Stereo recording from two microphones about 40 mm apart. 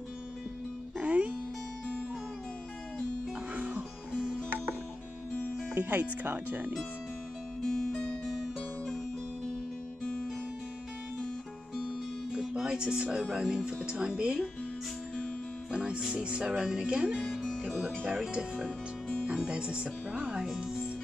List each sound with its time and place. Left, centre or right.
0.9 s music: right
3.5 s music: right
5.8 s speech: right
7.9 s guitar: left
11.8 s music: right
13.7 s speech: right
16.1 s speech: right
19.2 s speech: right
20.4 s speech: centre